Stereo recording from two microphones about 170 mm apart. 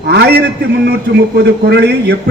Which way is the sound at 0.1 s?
75° right (ahead or behind).